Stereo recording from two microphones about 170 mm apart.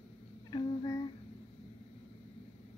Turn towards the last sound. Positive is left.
turn(degrees=25)  # may be behind; listen again after turning